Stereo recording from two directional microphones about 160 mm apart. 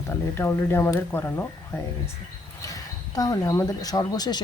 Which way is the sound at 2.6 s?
20° left (ahead or behind).